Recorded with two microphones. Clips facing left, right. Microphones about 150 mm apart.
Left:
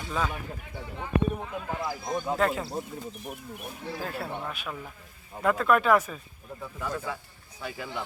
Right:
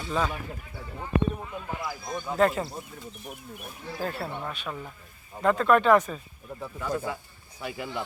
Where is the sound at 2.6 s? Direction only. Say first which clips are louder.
Left 5 dB; 35° left (ahead or behind).